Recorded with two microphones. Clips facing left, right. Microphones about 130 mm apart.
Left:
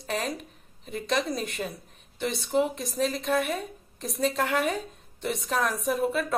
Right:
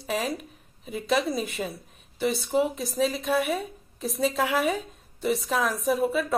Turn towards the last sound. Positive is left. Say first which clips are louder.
# right 2 dB
turn(degrees=0)  # may be behind; listen again after turning